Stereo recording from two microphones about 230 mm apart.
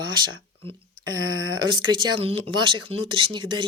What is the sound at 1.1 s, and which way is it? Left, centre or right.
Speech, right.